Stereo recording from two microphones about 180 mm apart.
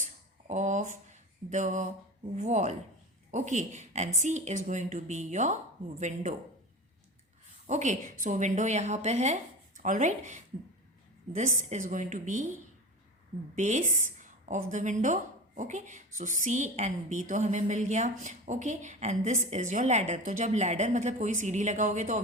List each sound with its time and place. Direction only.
0.0 s a sound: 45° right (ahead or behind)
1.5 s a woman's voice: 45° right (ahead or behind)
7.7 s a woman's voice: 40° right (ahead or behind)
13.6 s a woman's voice: 40° right (ahead or behind)